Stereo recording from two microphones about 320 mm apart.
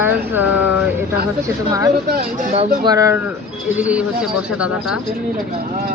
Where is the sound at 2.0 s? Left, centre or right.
Right.